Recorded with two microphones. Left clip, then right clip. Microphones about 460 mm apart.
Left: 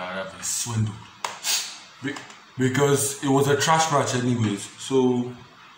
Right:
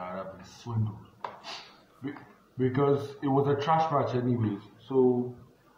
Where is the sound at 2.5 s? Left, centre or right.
Right.